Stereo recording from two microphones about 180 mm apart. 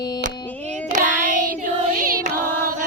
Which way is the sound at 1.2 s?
45° right (ahead or behind).